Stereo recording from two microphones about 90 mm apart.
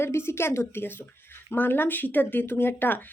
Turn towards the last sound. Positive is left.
turn(degrees=20)  # may be behind; listen again after turning